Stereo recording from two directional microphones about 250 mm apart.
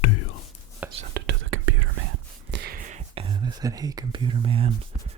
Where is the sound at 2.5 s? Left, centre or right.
Right.